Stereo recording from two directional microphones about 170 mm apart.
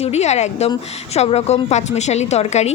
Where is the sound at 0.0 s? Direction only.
40° left (ahead or behind).